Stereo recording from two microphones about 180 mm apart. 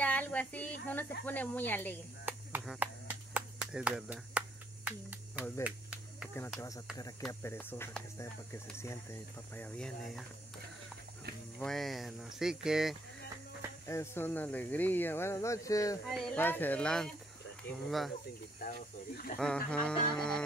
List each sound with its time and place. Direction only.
0.0 s a sound: 10° left (ahead or behind)
1.2 s speech: 10° left (ahead or behind)
2.2 s a sound: 5° right (ahead or behind)
5.6 s cricket: 5° right (ahead or behind)
7.0 s speech: 20° left (ahead or behind); by 10.2 s centre (ahead or behind)
11.6 s speech: centre (ahead or behind)
13.8 s speech: 15° left (ahead or behind)
18.6 s speech: 50° left (ahead or behind)
19.3 s speech: 5° left (ahead or behind)